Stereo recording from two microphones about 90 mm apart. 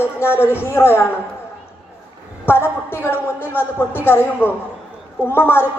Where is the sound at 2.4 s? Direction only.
25° left (ahead or behind).